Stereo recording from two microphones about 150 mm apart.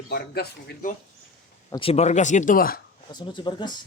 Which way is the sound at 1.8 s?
45° left (ahead or behind).